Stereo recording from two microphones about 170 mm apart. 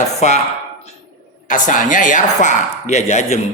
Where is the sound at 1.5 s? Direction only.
50° left (ahead or behind).